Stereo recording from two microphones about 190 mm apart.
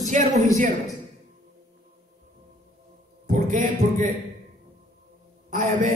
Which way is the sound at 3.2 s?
40° right (ahead or behind).